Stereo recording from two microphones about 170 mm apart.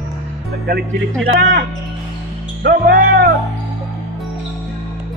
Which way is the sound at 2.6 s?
60° right (ahead or behind).